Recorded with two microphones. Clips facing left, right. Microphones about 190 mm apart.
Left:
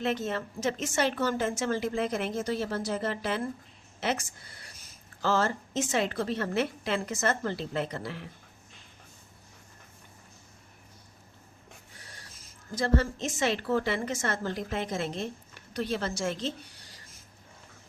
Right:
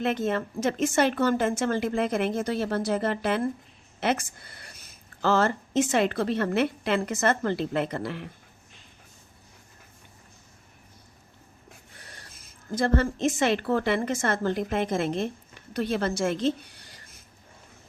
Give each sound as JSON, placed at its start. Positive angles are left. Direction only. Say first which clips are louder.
{"t": 0.0, "sound": "a woman's voice", "louder": "right 4 dB", "side_deg": -55}
{"t": 12.7, "sound": "a woman's voice", "louder": "right 3 dB", "side_deg": -55}